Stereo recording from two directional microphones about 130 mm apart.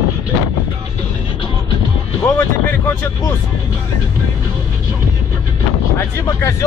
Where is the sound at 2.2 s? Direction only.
15° left (ahead or behind).